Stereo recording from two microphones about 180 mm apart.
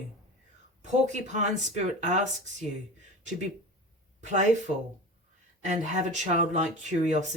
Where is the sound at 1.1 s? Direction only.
40° right (ahead or behind).